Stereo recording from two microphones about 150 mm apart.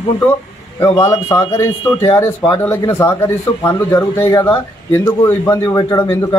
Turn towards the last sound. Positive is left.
turn(degrees=15)  # may be behind; listen again after turning